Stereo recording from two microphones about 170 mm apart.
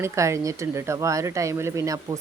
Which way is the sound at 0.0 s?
15° right (ahead or behind).